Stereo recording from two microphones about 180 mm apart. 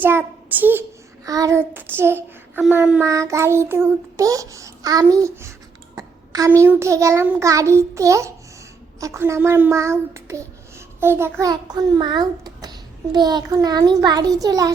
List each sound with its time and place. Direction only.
0.0 s a child's voice: 10° right (ahead or behind)
6.0 s a sound: 20° right (ahead or behind)
6.6 s a child's voice: 15° right (ahead or behind)